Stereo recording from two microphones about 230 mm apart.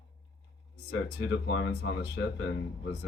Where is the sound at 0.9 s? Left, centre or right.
Left.